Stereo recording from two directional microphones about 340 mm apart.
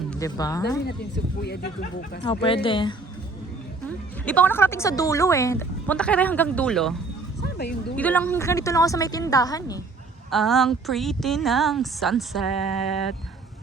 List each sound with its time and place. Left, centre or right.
0.1 s speech: centre
0.9 s speech: left
3.8 s speech: centre
7.4 s speech: left
7.9 s speech: centre